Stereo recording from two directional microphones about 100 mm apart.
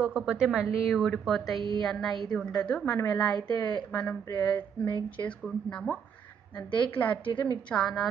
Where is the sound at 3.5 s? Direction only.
45° left (ahead or behind).